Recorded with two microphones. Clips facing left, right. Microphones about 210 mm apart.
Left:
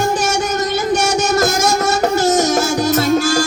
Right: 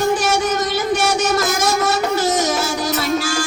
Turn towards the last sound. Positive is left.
turn(degrees=45)  # may be behind; listen again after turning